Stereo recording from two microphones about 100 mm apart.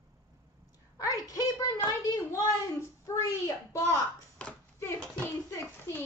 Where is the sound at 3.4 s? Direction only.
35° left (ahead or behind).